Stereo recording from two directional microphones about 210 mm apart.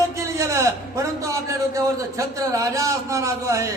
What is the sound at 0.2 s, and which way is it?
A man's voice, 15° right (ahead or behind).